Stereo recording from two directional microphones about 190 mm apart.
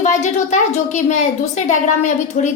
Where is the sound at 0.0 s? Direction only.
40° left (ahead or behind).